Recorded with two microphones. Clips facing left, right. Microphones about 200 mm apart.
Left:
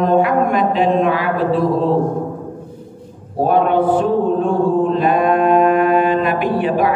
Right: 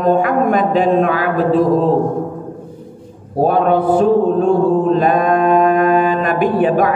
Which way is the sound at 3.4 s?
40° right (ahead or behind).